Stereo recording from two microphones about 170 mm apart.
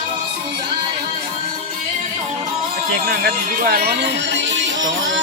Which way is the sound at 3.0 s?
60° right (ahead or behind).